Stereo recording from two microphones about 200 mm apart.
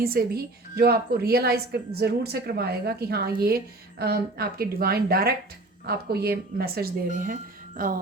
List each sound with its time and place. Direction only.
0.0 s speech: 50° right (ahead or behind)